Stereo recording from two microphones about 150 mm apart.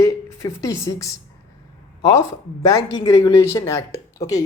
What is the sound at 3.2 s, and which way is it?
Speech, 20° left (ahead or behind).